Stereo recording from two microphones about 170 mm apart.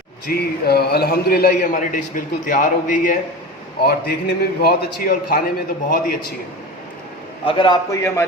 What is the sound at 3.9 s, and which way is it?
A man's voice, 65° left (ahead or behind).